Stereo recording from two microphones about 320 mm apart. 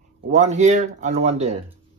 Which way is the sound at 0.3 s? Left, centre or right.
Right.